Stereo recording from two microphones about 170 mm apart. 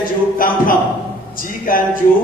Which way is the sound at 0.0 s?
55° left (ahead or behind).